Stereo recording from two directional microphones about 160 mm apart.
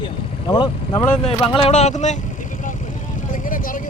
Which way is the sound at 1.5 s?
40° left (ahead or behind).